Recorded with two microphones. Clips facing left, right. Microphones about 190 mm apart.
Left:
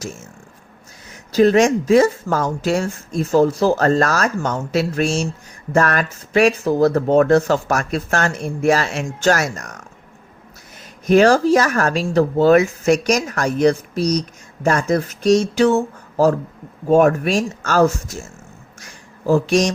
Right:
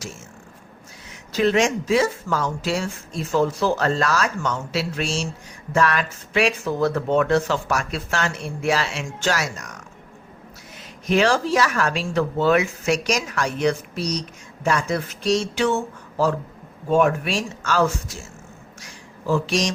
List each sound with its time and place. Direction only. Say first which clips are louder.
1.3 s speech: left 6 dB; 40° left (ahead or behind)
11.0 s speech: left 7 dB; 45° left (ahead or behind)
18.8 s a sound: left 5 dB; 45° left (ahead or behind)